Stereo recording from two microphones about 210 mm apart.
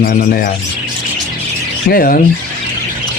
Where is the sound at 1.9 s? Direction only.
45° left (ahead or behind).